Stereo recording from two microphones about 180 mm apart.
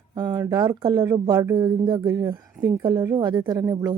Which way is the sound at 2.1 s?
15° right (ahead or behind).